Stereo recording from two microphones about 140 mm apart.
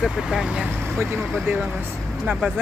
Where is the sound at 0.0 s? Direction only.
5° right (ahead or behind).